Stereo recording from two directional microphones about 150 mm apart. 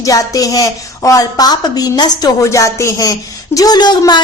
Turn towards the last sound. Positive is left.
turn(degrees=30)  # may be behind; listen again after turning